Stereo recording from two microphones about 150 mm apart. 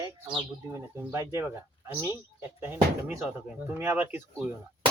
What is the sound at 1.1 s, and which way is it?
Speech, 20° right (ahead or behind).